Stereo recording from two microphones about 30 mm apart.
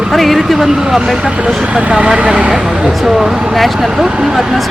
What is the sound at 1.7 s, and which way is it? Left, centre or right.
Speech, right.